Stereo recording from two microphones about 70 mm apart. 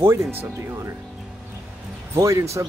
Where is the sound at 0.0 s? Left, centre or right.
Right.